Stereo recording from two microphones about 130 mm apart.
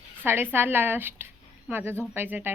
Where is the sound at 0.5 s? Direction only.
15° right (ahead or behind).